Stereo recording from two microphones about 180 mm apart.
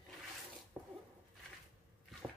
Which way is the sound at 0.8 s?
Centre (ahead or behind).